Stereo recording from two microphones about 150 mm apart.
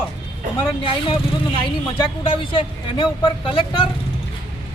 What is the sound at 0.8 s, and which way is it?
Speech, 35° left (ahead or behind).